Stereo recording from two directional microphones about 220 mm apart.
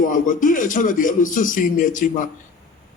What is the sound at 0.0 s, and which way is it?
Speech, 35° left (ahead or behind).